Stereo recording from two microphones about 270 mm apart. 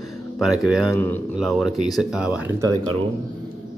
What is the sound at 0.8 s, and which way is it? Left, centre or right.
Speech, centre.